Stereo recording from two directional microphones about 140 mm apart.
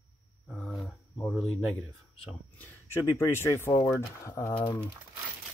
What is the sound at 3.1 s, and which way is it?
Speech, 20° left (ahead or behind).